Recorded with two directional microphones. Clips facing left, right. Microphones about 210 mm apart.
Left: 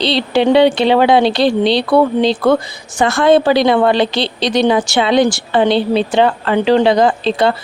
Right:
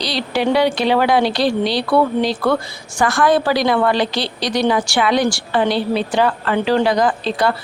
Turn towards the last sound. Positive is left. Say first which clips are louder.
# left 4 dB
turn(degrees=25)  # may be behind; listen again after turning